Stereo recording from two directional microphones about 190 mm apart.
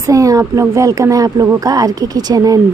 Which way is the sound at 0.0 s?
15° right (ahead or behind).